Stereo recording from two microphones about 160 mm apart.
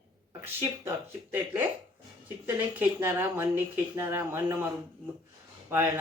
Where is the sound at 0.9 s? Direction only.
10° right (ahead or behind).